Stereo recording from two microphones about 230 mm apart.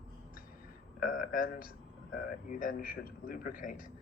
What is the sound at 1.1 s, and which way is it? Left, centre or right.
Speech, left.